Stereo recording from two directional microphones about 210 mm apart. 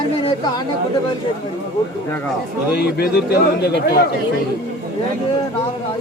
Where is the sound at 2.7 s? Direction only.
50° left (ahead or behind).